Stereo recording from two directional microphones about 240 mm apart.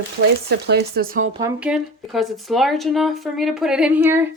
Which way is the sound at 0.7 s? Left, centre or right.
Right.